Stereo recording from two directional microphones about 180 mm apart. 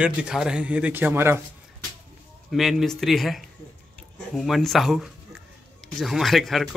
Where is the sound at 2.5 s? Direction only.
Centre (ahead or behind).